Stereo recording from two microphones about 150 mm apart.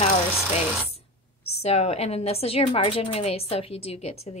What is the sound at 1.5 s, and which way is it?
A woman's voice, 45° left (ahead or behind).